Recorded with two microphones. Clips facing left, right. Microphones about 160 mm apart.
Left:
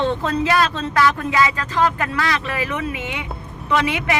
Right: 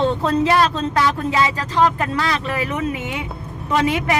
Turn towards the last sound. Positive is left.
turn(degrees=-40)  # may be behind; listen again after turning